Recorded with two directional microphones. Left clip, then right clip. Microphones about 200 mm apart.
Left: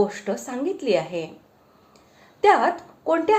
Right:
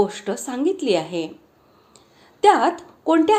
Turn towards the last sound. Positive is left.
turn(degrees=-30)  # may be behind; listen again after turning